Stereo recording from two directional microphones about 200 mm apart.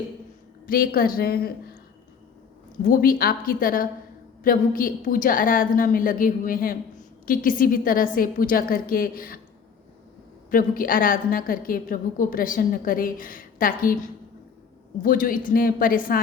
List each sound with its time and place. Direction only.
0.7 s a woman's voice: 45° left (ahead or behind)
2.8 s a woman's voice: 45° left (ahead or behind)
10.5 s a woman's voice: 45° left (ahead or behind)
15.0 s a woman's voice: 45° left (ahead or behind)